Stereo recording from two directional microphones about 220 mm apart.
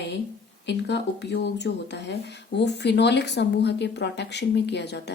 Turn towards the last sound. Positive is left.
turn(degrees=50)  # may be behind; listen again after turning